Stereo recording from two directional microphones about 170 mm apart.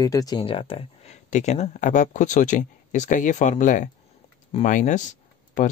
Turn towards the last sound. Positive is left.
turn(degrees=45)  # may be behind; listen again after turning